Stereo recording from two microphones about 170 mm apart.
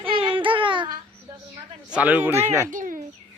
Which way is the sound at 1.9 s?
10° right (ahead or behind).